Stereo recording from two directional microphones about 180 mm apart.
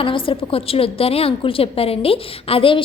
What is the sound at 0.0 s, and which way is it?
A woman's voice, 30° left (ahead or behind).